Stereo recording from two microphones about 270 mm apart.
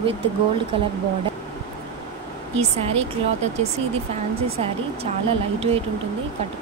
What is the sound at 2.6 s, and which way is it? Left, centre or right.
Speech, right.